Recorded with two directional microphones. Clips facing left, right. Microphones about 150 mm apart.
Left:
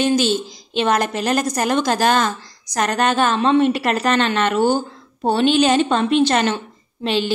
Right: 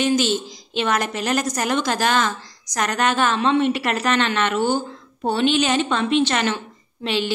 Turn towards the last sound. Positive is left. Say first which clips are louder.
# left 3 dB
turn(degrees=35)  # may be behind; listen again after turning